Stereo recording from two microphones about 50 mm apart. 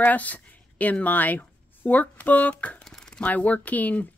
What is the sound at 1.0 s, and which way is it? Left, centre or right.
Speech, left.